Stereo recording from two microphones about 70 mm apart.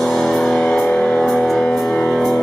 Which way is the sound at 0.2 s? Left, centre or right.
Centre.